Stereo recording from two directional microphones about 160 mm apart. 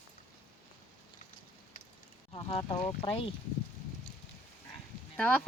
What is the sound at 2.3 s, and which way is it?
Speech, 40° left (ahead or behind).